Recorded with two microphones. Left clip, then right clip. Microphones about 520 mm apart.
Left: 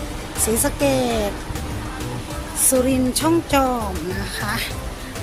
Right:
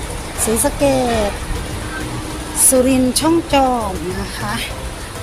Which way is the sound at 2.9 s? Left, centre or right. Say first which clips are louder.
Right 4 dB; left.